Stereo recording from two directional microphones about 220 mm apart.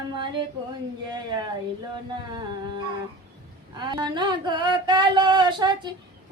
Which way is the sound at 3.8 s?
20° right (ahead or behind).